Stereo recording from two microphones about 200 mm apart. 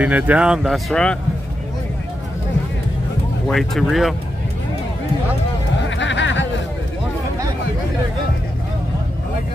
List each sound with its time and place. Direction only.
0.0 s speech: 5° right (ahead or behind)
3.4 s speech: centre (ahead or behind)
5.8 s a sound: 65° left (ahead or behind)